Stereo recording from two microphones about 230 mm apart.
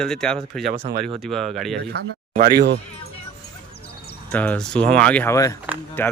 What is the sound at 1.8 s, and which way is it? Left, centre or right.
Speech, right.